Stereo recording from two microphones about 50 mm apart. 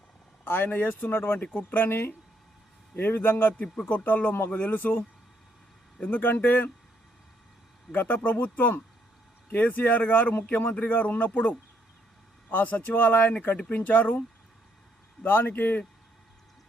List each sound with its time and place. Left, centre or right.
0.4 s speech: left
1.9 s a man's voice: left
3.8 s speech: left
7.9 s speech: left